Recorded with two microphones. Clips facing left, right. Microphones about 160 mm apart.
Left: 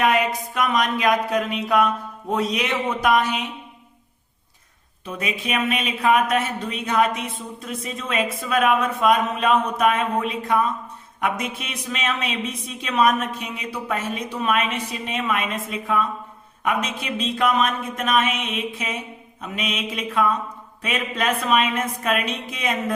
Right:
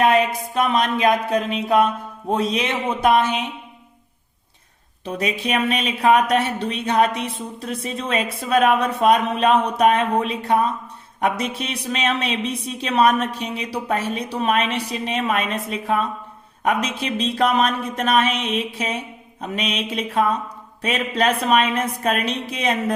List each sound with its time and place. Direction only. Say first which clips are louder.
0.0 s speech: right 3 dB; 25° right (ahead or behind)
5.0 s speech: right 4 dB; 35° right (ahead or behind)